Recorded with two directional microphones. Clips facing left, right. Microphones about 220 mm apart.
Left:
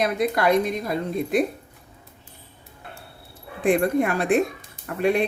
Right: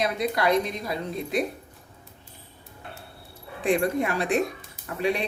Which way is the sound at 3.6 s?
50° left (ahead or behind).